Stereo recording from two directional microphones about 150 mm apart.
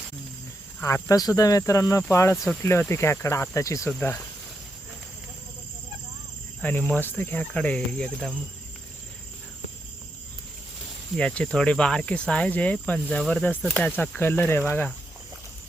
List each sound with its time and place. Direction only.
0.8 s speech: 15° left (ahead or behind)
2.3 s speech: centre (ahead or behind)
2.9 s speech: 15° left (ahead or behind)
6.6 s speech: 10° left (ahead or behind)
11.2 s speech: 5° left (ahead or behind)